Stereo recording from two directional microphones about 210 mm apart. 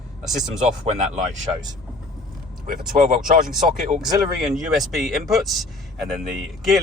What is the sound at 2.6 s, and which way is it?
Speech, 40° right (ahead or behind).